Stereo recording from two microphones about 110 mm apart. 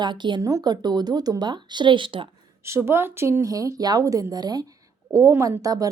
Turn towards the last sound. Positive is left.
turn(degrees=-35)  # may be behind; listen again after turning